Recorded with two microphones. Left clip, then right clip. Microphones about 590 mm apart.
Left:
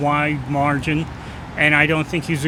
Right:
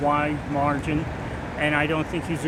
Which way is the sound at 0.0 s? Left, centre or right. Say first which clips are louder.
Left 3 dB; left.